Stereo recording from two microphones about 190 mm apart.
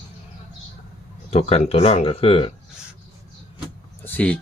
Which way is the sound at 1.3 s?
35° left (ahead or behind).